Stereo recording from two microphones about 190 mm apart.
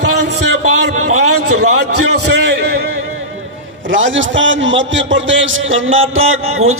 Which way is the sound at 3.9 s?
85° right.